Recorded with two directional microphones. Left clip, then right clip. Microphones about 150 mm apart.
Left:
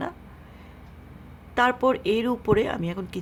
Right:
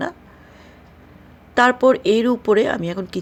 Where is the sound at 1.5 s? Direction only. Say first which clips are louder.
Right 7 dB; 25° right (ahead or behind).